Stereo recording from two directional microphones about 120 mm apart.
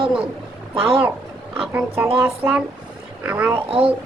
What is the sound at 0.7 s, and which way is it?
Speech, 50° right (ahead or behind).